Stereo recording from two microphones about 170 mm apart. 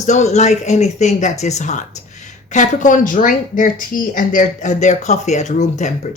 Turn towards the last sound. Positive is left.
turn(degrees=45)  # may be behind; listen again after turning